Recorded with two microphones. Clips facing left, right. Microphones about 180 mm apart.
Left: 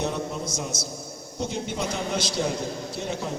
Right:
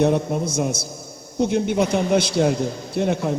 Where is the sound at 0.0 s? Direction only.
55° right (ahead or behind).